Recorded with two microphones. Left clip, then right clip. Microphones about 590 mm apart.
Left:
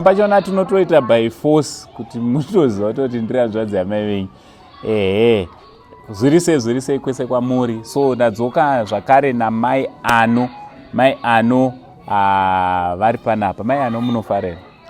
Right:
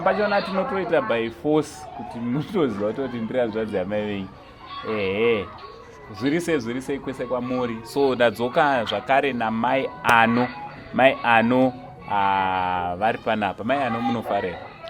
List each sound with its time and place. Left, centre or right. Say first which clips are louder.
0.0 s speech: left 9 dB; left
7.9 s speech: left 4 dB; left
12.0 s speech: left 7 dB; left